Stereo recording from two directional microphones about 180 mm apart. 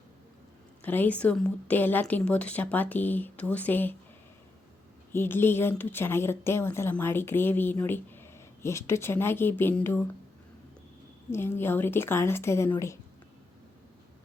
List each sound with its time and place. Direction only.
0.8 s a woman's voice: 10° left (ahead or behind)
5.1 s a woman's voice: 10° left (ahead or behind)
11.3 s a woman's voice: 15° left (ahead or behind)